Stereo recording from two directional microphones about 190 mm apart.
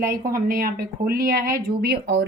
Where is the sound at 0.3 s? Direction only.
50° right (ahead or behind).